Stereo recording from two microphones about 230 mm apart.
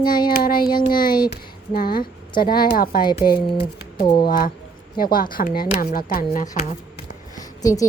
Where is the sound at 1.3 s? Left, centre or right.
Left.